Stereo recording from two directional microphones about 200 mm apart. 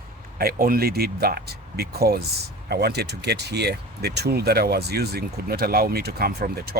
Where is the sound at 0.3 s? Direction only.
50° right (ahead or behind).